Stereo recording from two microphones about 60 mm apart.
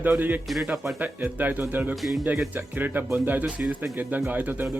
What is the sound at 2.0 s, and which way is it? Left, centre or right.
Speech, centre.